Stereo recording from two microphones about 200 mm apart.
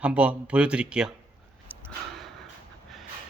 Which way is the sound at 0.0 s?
5° right (ahead or behind).